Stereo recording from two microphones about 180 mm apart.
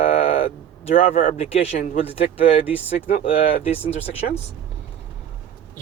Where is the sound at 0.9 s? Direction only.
50° left (ahead or behind); by 2.5 s 30° left (ahead or behind).